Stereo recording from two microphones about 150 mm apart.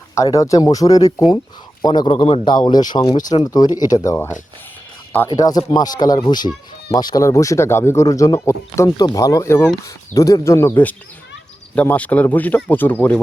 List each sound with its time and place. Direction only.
0.1 s a man's voice: 20° left (ahead or behind)
5.4 s speech: 25° left (ahead or behind)